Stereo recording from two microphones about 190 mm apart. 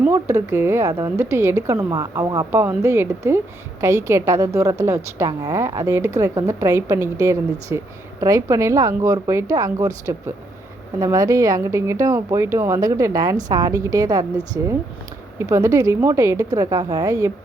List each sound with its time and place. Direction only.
0.0 s speech: 15° right (ahead or behind)